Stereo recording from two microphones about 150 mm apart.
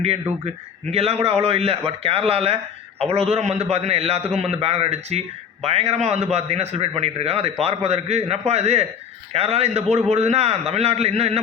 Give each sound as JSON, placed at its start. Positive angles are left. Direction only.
{"t": 0.9, "sound": "a man's voice", "side_deg": -40}